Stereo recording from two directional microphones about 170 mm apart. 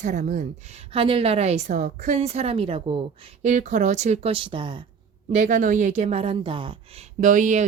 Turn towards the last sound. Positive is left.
turn(degrees=-50)  # may be behind; listen again after turning